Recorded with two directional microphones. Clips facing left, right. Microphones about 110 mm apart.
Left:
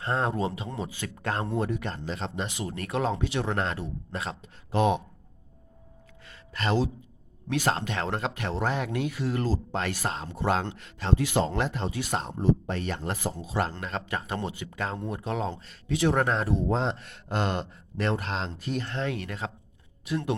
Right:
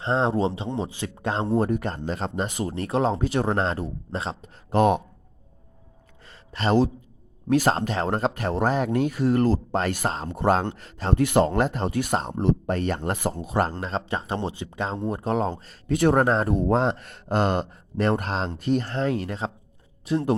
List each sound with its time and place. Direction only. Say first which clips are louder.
0.0 s speech: right 5 dB; 25° right (ahead or behind)
1.5 s speech: right 6 dB; 40° right (ahead or behind)
2.7 s speech: right 5 dB; 30° right (ahead or behind)
4.4 s speech: right 5 dB; 45° right (ahead or behind)
6.2 s a sound: right 5 dB; 35° right (ahead or behind)
7.4 s speech: right 6 dB; 40° right (ahead or behind)
11.1 s speech: right 6 dB; 55° right (ahead or behind)
13.1 s speech: right 5 dB; 60° right (ahead or behind)
13.8 s speech: right 4 dB; 30° right (ahead or behind); by 16.2 s 50° right (ahead or behind)
16.2 s speech: right 5 dB; 35° right (ahead or behind)
16.5 s speech: right 5 dB; 55° right (ahead or behind); by 20.3 s 35° right (ahead or behind)